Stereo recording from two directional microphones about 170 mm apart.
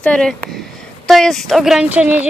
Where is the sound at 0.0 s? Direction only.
5° left (ahead or behind).